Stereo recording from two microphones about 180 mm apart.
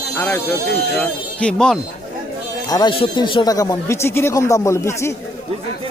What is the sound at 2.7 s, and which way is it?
Speech, 25° left (ahead or behind).